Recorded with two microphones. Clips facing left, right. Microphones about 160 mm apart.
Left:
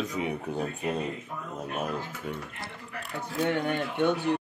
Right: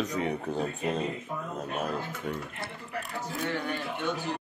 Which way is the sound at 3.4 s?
55° left (ahead or behind).